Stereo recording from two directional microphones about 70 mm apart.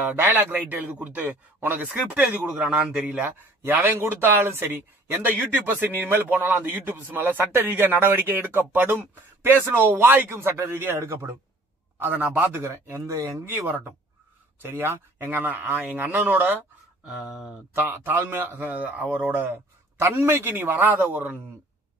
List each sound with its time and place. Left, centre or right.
0.0 s a man's voice: right
3.3 s a man's voice: right
10.3 s speech: right
13.5 s a man's voice: right
17.0 s speech: centre
17.8 s a man's voice: right
20.0 s speech: right